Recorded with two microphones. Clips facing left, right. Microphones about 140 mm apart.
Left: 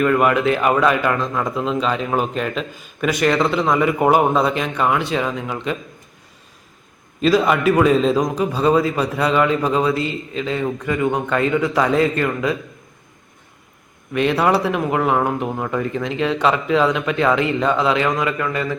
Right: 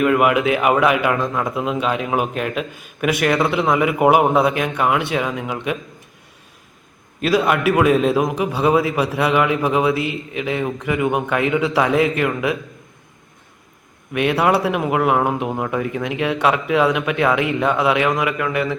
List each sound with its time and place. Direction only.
0.0 s a man's voice: 10° right (ahead or behind)
7.2 s a man's voice: 5° right (ahead or behind)
14.1 s a man's voice: 5° right (ahead or behind)